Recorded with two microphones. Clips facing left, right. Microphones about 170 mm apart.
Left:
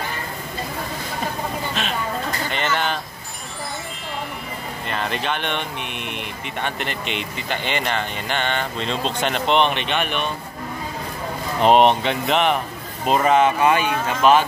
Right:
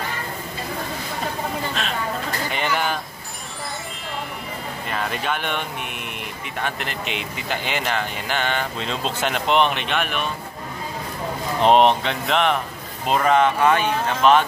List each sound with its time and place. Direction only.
1.8 s speech: centre (ahead or behind)
2.5 s speech: 10° right (ahead or behind)
4.8 s speech: 5° right (ahead or behind)
11.6 s speech: centre (ahead or behind)